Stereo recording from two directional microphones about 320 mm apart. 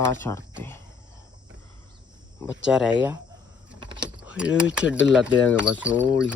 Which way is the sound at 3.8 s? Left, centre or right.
Centre.